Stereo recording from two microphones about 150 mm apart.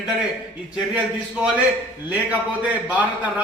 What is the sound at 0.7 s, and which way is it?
A man's voice, 5° right (ahead or behind).